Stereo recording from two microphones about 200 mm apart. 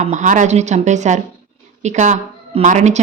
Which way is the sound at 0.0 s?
35° right (ahead or behind).